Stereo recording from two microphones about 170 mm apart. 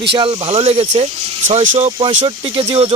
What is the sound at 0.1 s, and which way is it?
Speech, 30° right (ahead or behind).